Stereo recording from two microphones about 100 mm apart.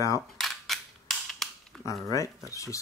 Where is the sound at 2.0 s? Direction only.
35° left (ahead or behind).